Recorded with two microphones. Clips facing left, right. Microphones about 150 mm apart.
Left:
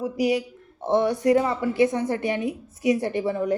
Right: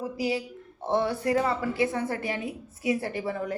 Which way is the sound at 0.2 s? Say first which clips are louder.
Left 7 dB; 20° left (ahead or behind).